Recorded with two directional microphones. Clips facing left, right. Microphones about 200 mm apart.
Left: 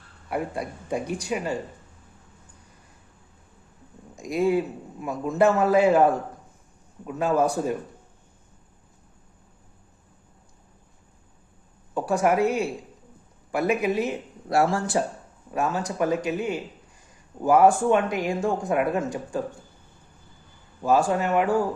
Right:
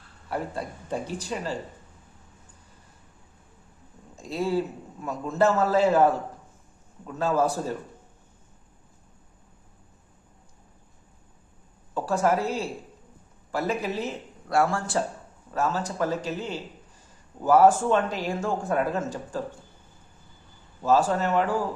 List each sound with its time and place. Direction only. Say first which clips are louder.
0.3 s speech: left 2 dB; 10° left (ahead or behind)
4.2 s speech: left 4 dB; 15° left (ahead or behind)
11.9 s a woman's voice: left 2 dB; 15° left (ahead or behind)
13.5 s speech: left 4 dB; 15° left (ahead or behind)
14.4 s speech: left 2 dB; 25° left (ahead or behind)
20.8 s speech: left 1 dB; 10° left (ahead or behind)